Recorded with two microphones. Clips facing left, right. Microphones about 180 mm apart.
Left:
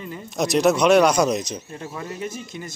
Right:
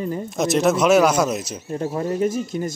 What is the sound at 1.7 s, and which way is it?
Speech, 40° right (ahead or behind).